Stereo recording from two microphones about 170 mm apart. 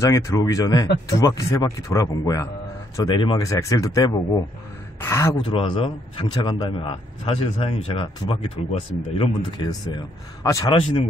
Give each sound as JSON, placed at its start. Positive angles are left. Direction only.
{"t": 0.0, "sound": "speech", "side_deg": 20}
{"t": 5.4, "sound": "a man's voice", "side_deg": 30}
{"t": 10.7, "sound": "a man's voice", "side_deg": 30}